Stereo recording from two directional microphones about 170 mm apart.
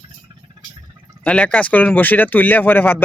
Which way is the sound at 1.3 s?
5° left (ahead or behind).